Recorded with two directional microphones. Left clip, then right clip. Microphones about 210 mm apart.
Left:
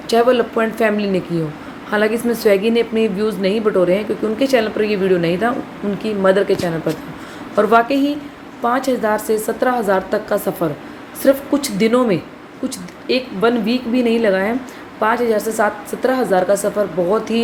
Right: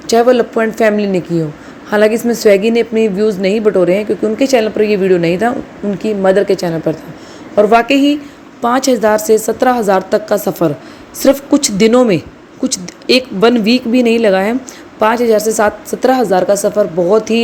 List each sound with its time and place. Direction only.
0.1 s a woman's voice: 30° right (ahead or behind)
7.5 s a woman's voice: 15° right (ahead or behind)
7.8 s a woman's voice: 30° right (ahead or behind)